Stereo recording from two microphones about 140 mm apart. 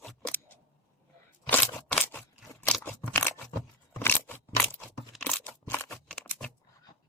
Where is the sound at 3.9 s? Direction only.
15° left (ahead or behind).